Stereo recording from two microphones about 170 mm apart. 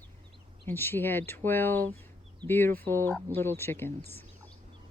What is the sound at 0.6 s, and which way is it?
Speech, 10° left (ahead or behind).